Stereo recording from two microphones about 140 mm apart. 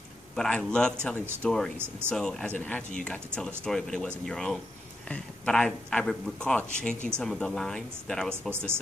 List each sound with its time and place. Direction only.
0.4 s speech: 10° left (ahead or behind)
8.5 s speech: 15° right (ahead or behind)